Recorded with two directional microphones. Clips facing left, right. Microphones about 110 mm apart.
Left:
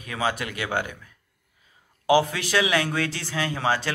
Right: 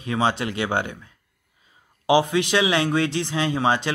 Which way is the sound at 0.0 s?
25° right (ahead or behind).